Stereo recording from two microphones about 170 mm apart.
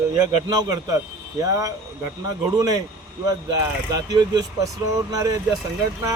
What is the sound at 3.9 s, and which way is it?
Speech, 25° right (ahead or behind).